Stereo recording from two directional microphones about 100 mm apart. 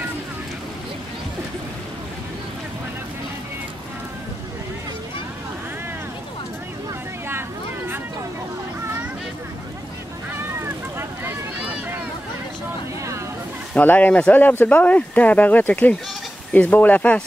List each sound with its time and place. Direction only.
10.6 s boat: 25° right (ahead or behind)
13.7 s speech: 15° left (ahead or behind)